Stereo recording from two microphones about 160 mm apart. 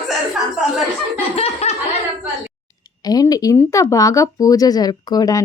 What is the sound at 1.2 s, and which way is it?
Snicker, 40° left (ahead or behind).